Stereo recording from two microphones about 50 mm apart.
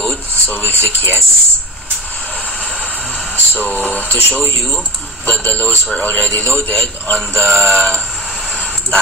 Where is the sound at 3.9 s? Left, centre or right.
Left.